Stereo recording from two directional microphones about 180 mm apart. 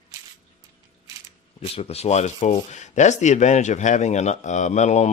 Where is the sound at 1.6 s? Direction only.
35° left (ahead or behind).